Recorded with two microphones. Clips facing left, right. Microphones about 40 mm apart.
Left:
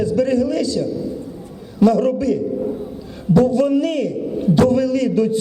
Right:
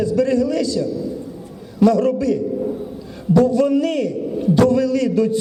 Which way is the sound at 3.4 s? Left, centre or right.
Left.